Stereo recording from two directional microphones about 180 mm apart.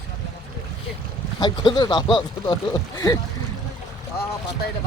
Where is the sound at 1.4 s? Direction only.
25° left (ahead or behind).